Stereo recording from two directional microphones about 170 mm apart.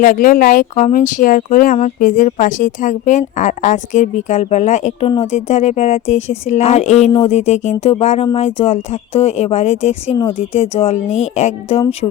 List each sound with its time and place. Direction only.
0.0 s a woman's voice: 50° left (ahead or behind); by 11.9 s 35° left (ahead or behind)